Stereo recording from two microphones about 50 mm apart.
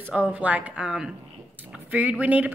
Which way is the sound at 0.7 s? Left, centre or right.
Centre.